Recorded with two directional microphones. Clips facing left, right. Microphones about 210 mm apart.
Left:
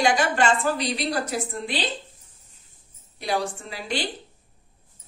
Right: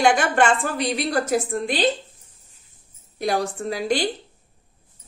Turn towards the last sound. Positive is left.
turn(degrees=-45)  # may be behind; listen again after turning